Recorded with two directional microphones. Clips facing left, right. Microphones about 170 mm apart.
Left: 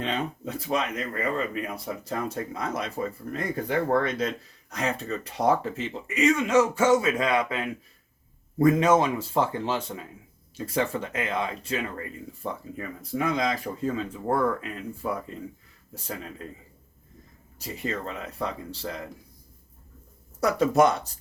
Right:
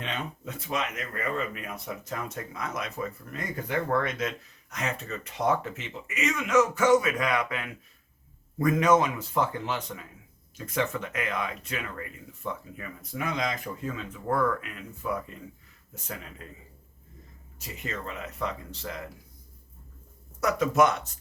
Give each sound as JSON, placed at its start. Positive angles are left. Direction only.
{"t": 0.0, "sound": "speech", "side_deg": 35}
{"t": 17.6, "sound": "speech", "side_deg": 35}
{"t": 20.4, "sound": "speech", "side_deg": 30}